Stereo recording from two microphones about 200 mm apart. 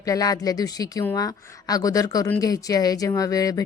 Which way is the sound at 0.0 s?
15° left (ahead or behind).